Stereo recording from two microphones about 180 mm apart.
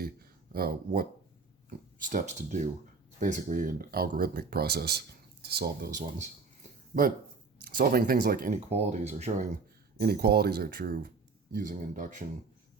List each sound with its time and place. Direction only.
0.0 s a sound: 55° right (ahead or behind)
2.0 s speech: 45° right (ahead or behind); by 5.9 s 65° right (ahead or behind)
5.9 s a sound: 40° right (ahead or behind)
7.6 s speech: 55° right (ahead or behind)
8.7 s speech: 40° right (ahead or behind)
10.0 s speech: 60° right (ahead or behind); by 12.2 s 45° right (ahead or behind)